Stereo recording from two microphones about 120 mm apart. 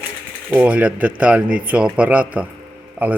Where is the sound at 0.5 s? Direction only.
10° right (ahead or behind).